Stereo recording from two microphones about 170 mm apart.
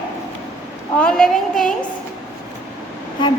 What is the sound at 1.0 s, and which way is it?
Speech, 5° left (ahead or behind).